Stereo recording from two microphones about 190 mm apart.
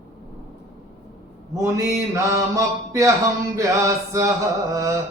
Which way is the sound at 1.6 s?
15° right (ahead or behind).